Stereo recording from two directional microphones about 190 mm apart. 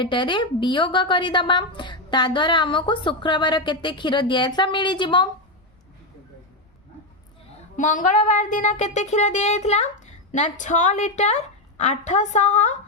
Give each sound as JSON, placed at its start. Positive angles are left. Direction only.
{"t": 0.0, "sound": "a woman's voice", "side_deg": 25}
{"t": 7.8, "sound": "speech", "side_deg": 40}